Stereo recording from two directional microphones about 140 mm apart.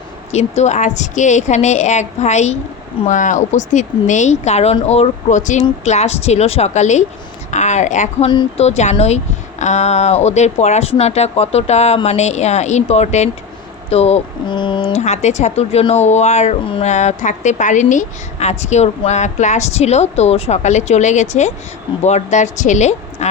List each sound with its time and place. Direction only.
0.3 s a woman's voice: 50° left (ahead or behind)
14.4 s speech: 35° left (ahead or behind)
14.9 s a woman's voice: 55° left (ahead or behind)